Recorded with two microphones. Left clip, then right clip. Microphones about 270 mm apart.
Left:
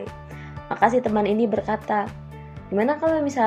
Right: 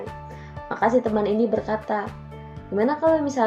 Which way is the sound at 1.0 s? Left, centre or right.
Left.